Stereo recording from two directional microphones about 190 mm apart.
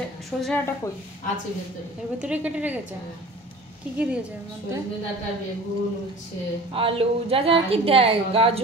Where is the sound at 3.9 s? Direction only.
5° right (ahead or behind).